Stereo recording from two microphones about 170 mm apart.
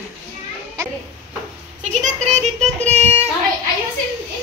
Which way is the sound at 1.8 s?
40° right (ahead or behind).